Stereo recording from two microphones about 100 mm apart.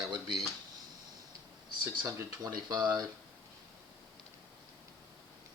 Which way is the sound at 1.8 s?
30° right (ahead or behind).